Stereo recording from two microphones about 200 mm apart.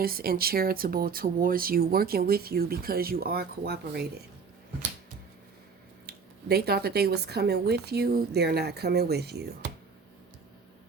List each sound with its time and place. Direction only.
0.0 s speech: 50° right (ahead or behind)
6.1 s speech: 50° right (ahead or behind)